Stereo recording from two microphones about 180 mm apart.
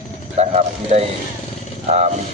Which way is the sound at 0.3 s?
35° right (ahead or behind).